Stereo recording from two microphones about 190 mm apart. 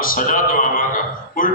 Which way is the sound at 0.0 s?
45° left (ahead or behind).